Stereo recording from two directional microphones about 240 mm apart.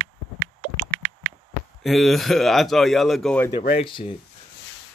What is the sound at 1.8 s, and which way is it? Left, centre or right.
A man's voice, centre.